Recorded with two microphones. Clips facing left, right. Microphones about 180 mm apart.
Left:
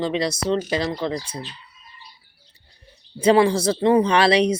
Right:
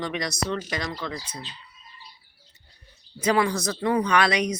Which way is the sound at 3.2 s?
30° left (ahead or behind).